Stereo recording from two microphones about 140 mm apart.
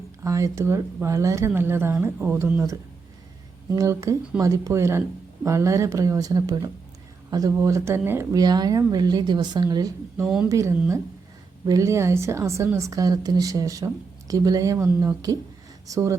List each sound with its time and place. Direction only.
0.3 s a woman's voice: 20° right (ahead or behind)
10.2 s speech: 5° right (ahead or behind)
10.5 s a woman's voice: 20° right (ahead or behind)